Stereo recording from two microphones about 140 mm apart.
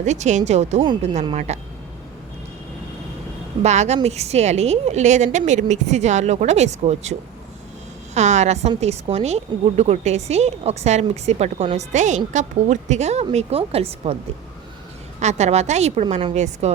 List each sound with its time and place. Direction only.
0.0 s a woman's voice: 55° right (ahead or behind)
3.6 s a woman's voice: 55° right (ahead or behind)
15.2 s a woman's voice: 55° right (ahead or behind)